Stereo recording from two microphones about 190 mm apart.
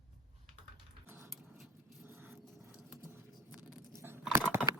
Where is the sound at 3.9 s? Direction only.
10° right (ahead or behind).